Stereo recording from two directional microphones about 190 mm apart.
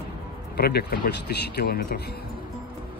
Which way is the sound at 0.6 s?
55° left (ahead or behind).